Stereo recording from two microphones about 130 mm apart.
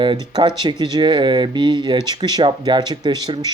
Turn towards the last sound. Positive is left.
turn(degrees=-30)  # may be behind; listen again after turning